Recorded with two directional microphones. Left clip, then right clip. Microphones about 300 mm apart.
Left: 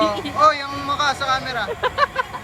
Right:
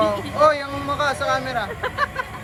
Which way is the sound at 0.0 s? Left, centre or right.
Centre.